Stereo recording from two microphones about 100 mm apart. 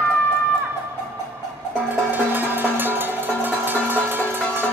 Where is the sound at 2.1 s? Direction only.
20° right (ahead or behind).